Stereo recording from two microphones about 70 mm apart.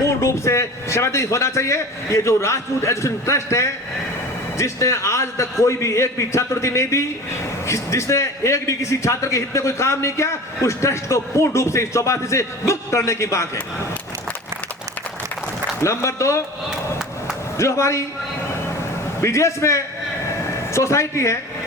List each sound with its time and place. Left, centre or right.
0.0 s a man's voice: left
15.8 s a man's voice: left
17.6 s a man's voice: left
19.2 s a man's voice: left